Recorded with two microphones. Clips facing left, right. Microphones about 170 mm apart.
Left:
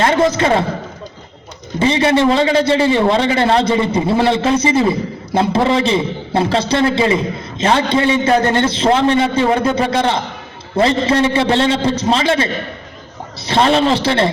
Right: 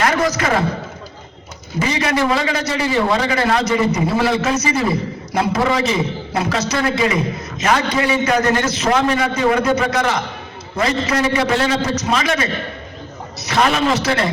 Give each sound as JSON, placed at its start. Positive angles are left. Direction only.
{"t": 0.0, "sound": "a man's voice", "side_deg": 25}
{"t": 1.8, "sound": "a man's voice", "side_deg": 30}